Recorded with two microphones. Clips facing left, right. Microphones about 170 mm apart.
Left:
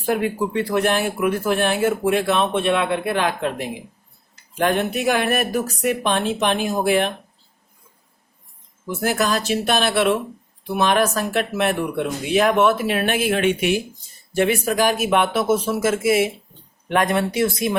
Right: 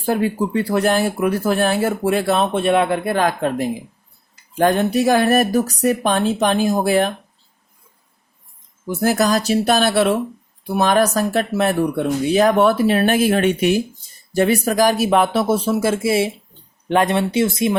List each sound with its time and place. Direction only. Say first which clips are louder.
0.0 s speech: right 2 dB; 30° right (ahead or behind)
9.0 s speech: right 4 dB; 35° right (ahead or behind)